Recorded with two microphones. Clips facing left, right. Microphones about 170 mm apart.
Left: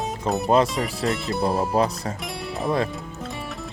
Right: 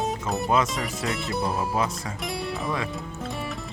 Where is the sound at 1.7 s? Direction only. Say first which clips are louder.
Left 5 dB; 35° left (ahead or behind).